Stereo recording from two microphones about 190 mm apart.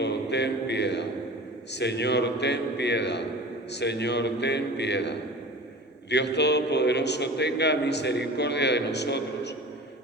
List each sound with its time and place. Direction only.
0.0 s mantra: 65° left (ahead or behind)
1.7 s a man's voice: 65° left (ahead or behind)